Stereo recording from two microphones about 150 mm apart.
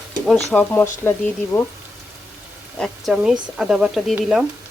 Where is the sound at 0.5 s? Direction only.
10° left (ahead or behind).